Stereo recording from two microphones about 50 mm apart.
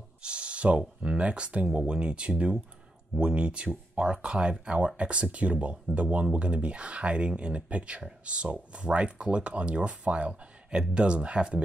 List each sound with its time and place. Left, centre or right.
0.2 s speech: right